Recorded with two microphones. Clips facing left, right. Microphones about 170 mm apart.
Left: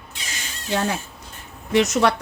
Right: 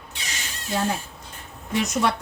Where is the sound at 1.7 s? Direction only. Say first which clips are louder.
Left 5 dB; 80° left.